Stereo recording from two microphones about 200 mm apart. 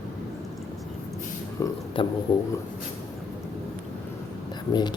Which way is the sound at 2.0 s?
25° left (ahead or behind).